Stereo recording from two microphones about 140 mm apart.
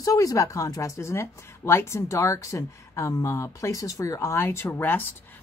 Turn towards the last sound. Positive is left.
turn(degrees=15)  # may be behind; listen again after turning